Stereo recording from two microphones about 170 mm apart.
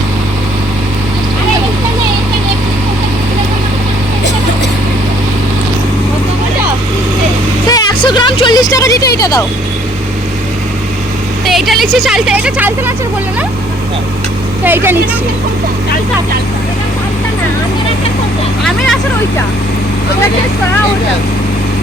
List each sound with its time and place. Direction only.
7.7 s vehicle: 25° left (ahead or behind)
11.4 s a woman's voice: centre (ahead or behind)
14.6 s speech: 10° right (ahead or behind)